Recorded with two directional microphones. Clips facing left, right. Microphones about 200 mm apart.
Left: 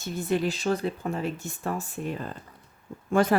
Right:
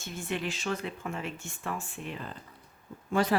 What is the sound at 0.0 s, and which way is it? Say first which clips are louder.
Speech: left 8 dB; 40° left (ahead or behind).